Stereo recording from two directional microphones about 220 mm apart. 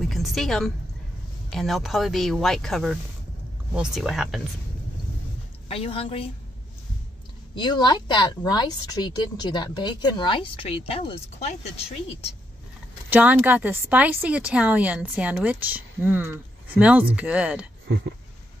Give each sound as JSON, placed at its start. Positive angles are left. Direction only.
{"t": 0.0, "sound": "a woman's voice", "side_deg": 0}
{"t": 5.7, "sound": "speech", "side_deg": 25}
{"t": 7.5, "sound": "speech", "side_deg": 20}
{"t": 13.1, "sound": "speech", "side_deg": -10}
{"t": 17.8, "sound": "a sound", "side_deg": -55}